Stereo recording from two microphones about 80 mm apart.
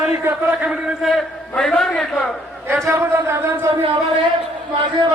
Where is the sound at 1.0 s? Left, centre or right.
Centre.